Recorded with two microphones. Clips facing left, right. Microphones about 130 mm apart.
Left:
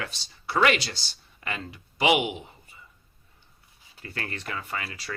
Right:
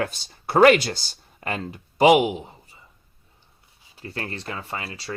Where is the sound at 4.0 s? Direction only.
30° right (ahead or behind).